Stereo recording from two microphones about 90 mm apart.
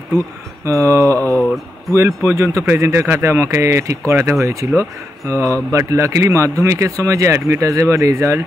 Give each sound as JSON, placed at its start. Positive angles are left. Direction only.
{"t": 0.7, "sound": "speech", "side_deg": -35}